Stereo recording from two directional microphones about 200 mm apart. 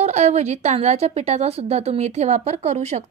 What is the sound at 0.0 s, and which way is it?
A woman's voice, 35° right (ahead or behind).